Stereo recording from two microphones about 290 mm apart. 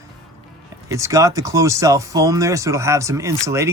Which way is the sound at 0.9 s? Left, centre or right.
Centre.